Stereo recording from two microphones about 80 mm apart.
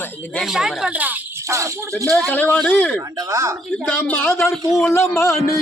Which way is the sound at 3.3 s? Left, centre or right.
Right.